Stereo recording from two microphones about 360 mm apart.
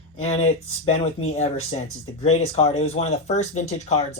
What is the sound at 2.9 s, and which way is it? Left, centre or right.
Speech, centre.